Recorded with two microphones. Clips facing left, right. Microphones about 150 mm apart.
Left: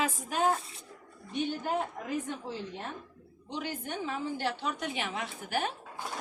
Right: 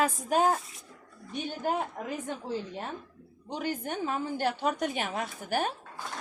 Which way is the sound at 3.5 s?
45° right (ahead or behind).